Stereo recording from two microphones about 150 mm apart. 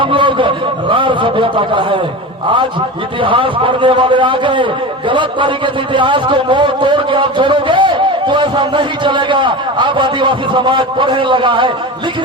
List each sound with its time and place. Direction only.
0.0 s a man's voice: 35° right (ahead or behind)
3.2 s a man's voice: 35° right (ahead or behind)